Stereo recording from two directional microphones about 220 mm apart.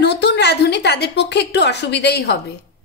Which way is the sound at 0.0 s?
50° left (ahead or behind).